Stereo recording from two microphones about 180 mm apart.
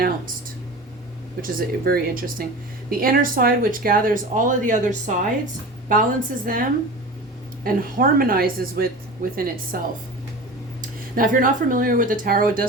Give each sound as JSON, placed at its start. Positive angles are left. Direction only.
{"t": 1.4, "sound": "a woman's voice", "side_deg": -50}